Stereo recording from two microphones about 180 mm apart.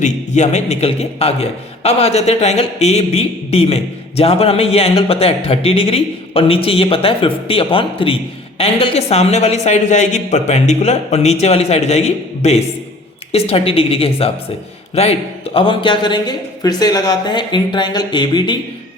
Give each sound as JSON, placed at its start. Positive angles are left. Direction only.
{"t": 0.0, "sound": "a man's voice", "side_deg": 40}